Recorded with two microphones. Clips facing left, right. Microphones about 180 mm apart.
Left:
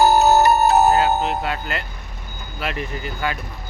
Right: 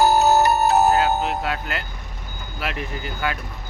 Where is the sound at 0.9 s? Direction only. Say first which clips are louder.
Left 2 dB; centre (ahead or behind).